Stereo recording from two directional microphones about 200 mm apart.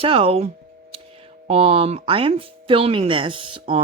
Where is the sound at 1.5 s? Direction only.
30° right (ahead or behind).